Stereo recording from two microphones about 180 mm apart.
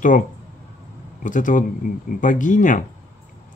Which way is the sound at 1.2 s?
45° left (ahead or behind).